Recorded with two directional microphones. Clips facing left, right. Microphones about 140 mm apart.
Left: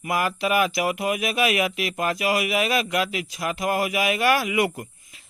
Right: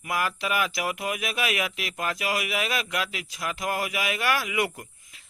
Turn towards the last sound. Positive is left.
turn(degrees=15)  # may be behind; listen again after turning